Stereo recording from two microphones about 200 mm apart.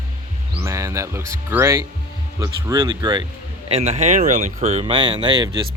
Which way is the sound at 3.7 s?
30° right (ahead or behind).